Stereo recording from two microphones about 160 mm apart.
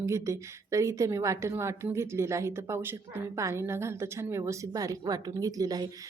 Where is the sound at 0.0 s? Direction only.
20° right (ahead or behind).